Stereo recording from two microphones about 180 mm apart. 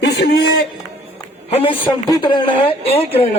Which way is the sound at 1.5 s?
30° left (ahead or behind).